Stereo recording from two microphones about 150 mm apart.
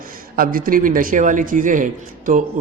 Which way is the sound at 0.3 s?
70° right (ahead or behind).